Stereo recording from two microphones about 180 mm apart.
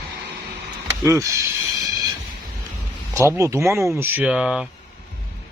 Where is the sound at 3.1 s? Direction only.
15° right (ahead or behind).